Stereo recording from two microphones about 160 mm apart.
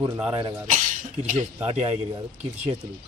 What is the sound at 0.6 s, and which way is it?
Speech, 55° right (ahead or behind).